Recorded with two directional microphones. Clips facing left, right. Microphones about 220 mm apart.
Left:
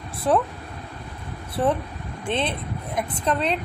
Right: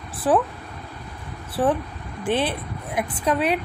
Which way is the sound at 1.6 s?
10° right (ahead or behind).